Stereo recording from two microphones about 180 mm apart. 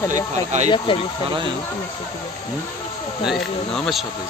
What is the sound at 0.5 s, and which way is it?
Speech, 40° right (ahead or behind).